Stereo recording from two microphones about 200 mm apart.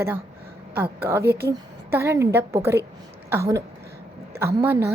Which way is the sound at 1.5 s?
15° right (ahead or behind).